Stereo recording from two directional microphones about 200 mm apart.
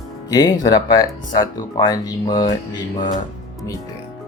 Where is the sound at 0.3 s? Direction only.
20° left (ahead or behind).